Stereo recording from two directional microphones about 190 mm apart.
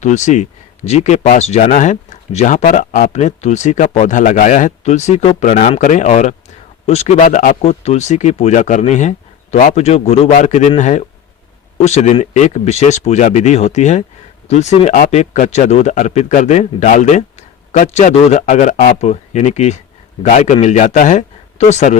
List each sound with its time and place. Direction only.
0.0 s speech: 40° left (ahead or behind)